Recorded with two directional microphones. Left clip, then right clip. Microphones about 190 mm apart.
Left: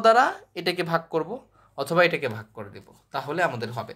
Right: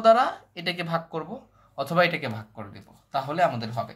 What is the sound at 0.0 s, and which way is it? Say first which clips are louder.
Speech: left 1 dB; 35° left (ahead or behind).